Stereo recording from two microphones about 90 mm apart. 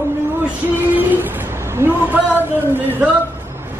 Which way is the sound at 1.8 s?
20° right (ahead or behind).